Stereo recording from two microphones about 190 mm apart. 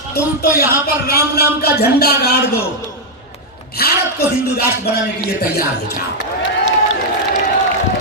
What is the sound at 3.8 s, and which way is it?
Speech, 55° left (ahead or behind).